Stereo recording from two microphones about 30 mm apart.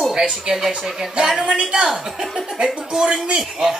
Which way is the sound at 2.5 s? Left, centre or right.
Right.